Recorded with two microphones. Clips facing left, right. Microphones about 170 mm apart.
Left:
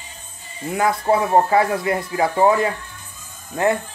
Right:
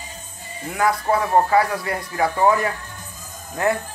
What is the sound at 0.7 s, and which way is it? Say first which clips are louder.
Speech: left 2 dB; 25° left (ahead or behind).